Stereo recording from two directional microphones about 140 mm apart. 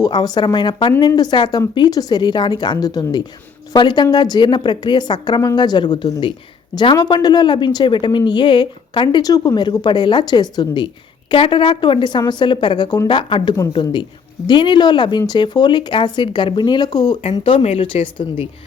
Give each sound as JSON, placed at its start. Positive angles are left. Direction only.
{"t": 0.0, "sound": "a woman's voice", "side_deg": 30}
{"t": 6.7, "sound": "a woman's voice", "side_deg": 30}